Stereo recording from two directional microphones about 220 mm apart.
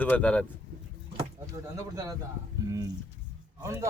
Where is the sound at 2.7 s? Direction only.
15° right (ahead or behind).